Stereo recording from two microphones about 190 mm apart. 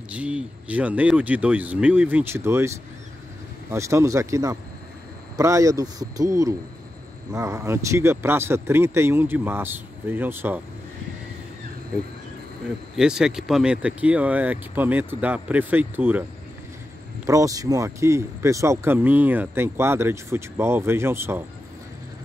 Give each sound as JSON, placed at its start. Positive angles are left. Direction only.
{"t": 0.1, "sound": "speech", "side_deg": -5}
{"t": 3.7, "sound": "speech", "side_deg": -15}
{"t": 12.9, "sound": "speech", "side_deg": -5}
{"t": 17.3, "sound": "speech", "side_deg": -15}